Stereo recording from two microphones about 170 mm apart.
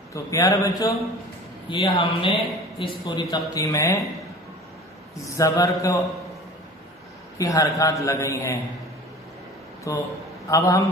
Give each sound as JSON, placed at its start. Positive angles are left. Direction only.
{"t": 0.1, "sound": "a man's voice", "side_deg": 20}
{"t": 1.7, "sound": "a man's voice", "side_deg": 30}
{"t": 5.2, "sound": "a man's voice", "side_deg": 20}
{"t": 7.3, "sound": "a man's voice", "side_deg": 20}
{"t": 9.9, "sound": "a man's voice", "side_deg": 20}